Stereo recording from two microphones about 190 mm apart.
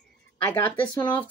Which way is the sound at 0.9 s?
25° left (ahead or behind).